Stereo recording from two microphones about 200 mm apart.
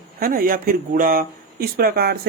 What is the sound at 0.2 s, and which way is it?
Speech, 45° right (ahead or behind).